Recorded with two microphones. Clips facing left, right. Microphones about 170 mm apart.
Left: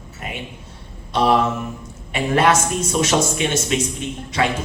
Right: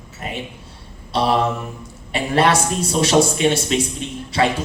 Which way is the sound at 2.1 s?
30° right (ahead or behind).